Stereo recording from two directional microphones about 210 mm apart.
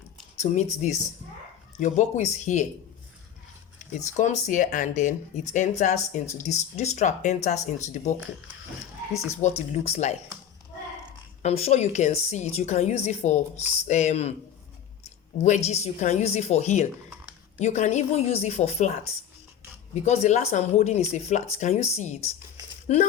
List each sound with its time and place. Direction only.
0.3 s speech: 35° left (ahead or behind)
3.9 s speech: 35° left (ahead or behind)
9.4 s speech: 30° left (ahead or behind)
11.4 s speech: 30° left (ahead or behind)